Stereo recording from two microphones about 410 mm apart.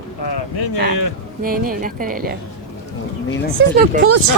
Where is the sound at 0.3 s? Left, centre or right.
Left.